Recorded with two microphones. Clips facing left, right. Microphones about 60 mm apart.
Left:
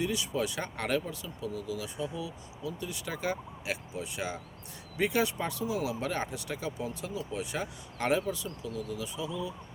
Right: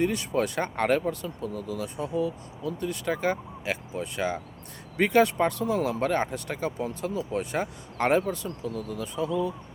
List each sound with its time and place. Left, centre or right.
0.0 s speech: right
8.6 s speech: right